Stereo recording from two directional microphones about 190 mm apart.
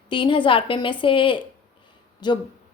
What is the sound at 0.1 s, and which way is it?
A woman's voice, 25° left (ahead or behind).